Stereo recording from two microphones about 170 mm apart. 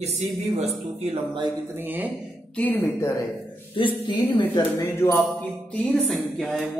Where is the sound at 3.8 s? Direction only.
30° left (ahead or behind).